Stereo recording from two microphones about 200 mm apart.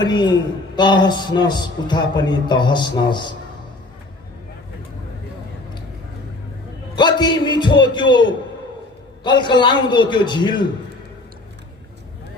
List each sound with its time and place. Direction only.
0.0 s a man's voice: 20° left (ahead or behind)
6.9 s a man's voice: 20° left (ahead or behind)